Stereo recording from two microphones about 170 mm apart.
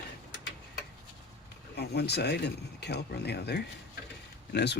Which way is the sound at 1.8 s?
75° left (ahead or behind).